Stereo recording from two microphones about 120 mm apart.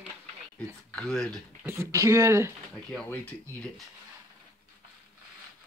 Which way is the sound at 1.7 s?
25° right (ahead or behind).